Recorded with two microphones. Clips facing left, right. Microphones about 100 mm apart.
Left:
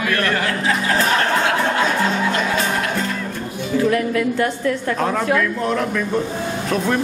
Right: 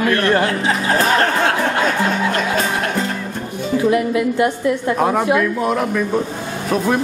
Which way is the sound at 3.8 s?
15° right (ahead or behind).